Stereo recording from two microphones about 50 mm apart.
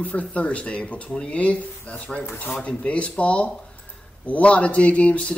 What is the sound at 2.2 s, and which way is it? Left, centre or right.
Dishes, left.